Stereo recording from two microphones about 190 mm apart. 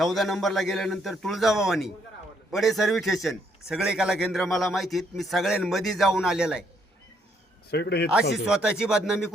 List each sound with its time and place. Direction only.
0.0 s a man's voice: centre (ahead or behind)
7.7 s speech: 60° left (ahead or behind)
8.4 s a man's voice: 5° right (ahead or behind)